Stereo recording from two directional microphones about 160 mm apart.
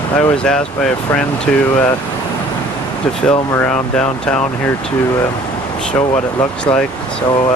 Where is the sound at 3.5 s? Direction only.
10° left (ahead or behind).